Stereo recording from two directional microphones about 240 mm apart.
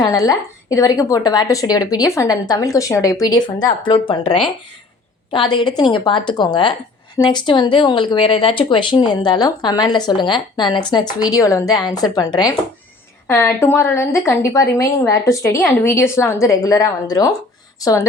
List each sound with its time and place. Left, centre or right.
0.0 s a woman's voice: centre